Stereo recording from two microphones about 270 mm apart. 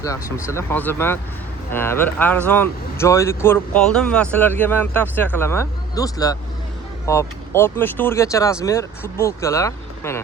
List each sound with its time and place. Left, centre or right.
0.0 s speech: centre